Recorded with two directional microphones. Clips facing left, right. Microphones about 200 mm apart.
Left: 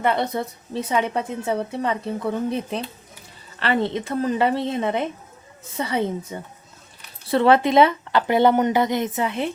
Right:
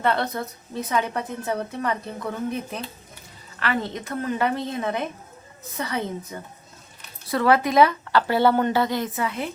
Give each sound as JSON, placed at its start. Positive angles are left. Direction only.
{"t": 0.0, "sound": "a woman's voice", "side_deg": 15}